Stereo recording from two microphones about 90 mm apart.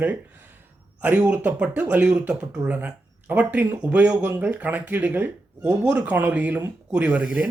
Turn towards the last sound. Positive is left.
turn(degrees=-15)  # may be behind; listen again after turning